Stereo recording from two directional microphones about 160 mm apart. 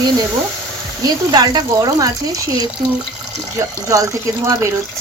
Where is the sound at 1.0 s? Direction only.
25° right (ahead or behind).